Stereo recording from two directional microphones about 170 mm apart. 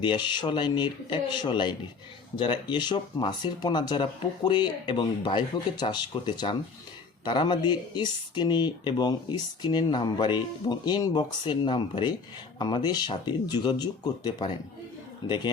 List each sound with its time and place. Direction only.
0.0 s speech: 25° left (ahead or behind)